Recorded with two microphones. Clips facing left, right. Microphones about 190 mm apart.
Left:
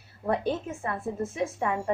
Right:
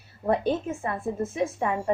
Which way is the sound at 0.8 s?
20° right (ahead or behind).